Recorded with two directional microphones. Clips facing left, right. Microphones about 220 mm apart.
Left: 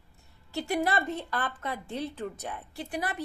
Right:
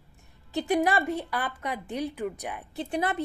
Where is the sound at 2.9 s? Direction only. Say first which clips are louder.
Right 5 dB; 25° right (ahead or behind).